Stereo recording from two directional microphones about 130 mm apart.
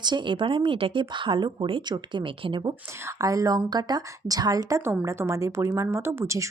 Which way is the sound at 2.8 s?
20° right (ahead or behind).